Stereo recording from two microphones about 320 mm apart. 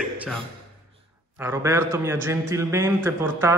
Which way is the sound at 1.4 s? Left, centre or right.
Centre.